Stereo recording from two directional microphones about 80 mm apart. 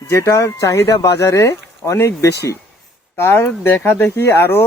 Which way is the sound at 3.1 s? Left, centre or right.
Left.